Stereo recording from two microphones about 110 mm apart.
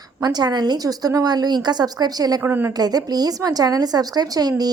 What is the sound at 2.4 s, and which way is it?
Speech, 20° right (ahead or behind).